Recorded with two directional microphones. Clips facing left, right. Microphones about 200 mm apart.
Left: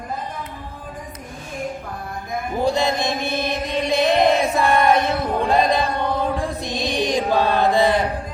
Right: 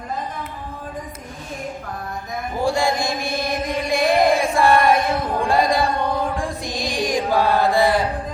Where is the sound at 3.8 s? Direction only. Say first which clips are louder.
Left 1 dB; 20° left (ahead or behind).